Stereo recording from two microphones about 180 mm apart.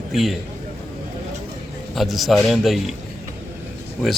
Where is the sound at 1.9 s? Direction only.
Centre (ahead or behind).